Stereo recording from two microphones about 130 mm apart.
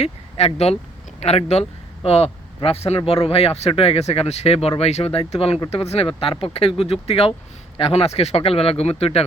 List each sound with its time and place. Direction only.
0.0 s speech: 55° left (ahead or behind)